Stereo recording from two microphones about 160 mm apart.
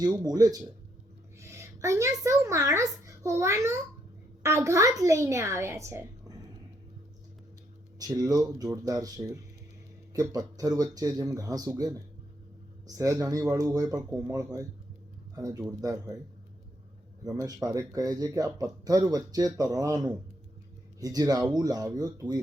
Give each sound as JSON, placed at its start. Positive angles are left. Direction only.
{"t": 0.0, "sound": "speech", "side_deg": -20}
{"t": 7.9, "sound": "speech", "side_deg": -25}
{"t": 13.0, "sound": "speech", "side_deg": -20}
{"t": 17.2, "sound": "speech", "side_deg": -20}